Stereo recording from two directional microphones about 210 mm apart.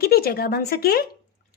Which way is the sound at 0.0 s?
45° left (ahead or behind).